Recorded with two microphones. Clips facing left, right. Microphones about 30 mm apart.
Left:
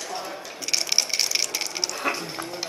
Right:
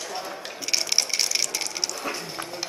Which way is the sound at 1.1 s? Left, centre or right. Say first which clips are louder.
Left 1 dB; centre.